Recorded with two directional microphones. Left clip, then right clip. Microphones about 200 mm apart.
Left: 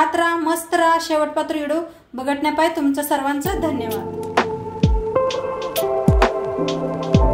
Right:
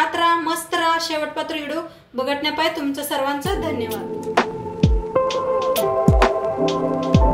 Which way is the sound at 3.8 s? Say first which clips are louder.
Left 1 dB; centre (ahead or behind).